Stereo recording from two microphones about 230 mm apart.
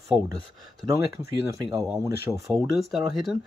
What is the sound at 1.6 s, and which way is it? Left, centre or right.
Speech, centre.